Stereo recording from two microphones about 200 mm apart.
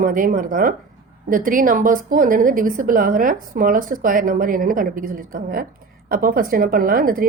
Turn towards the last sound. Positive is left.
turn(degrees=-45)  # may be behind; listen again after turning